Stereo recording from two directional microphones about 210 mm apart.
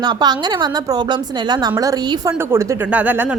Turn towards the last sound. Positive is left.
turn(degrees=-10)  # may be behind; listen again after turning